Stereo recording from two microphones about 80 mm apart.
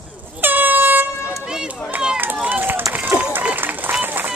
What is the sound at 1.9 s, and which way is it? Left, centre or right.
Run, right.